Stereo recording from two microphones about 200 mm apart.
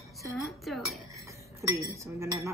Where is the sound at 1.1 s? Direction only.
15° right (ahead or behind).